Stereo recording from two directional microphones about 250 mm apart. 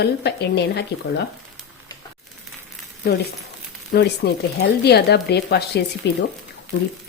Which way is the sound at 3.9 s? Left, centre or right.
Left.